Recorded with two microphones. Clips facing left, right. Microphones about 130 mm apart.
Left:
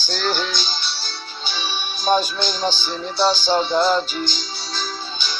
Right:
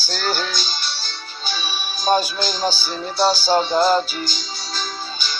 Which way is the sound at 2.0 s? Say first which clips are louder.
Even; 5° right (ahead or behind).